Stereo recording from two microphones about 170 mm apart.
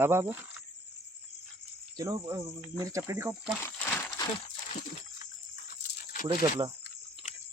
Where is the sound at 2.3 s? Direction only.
20° right (ahead or behind).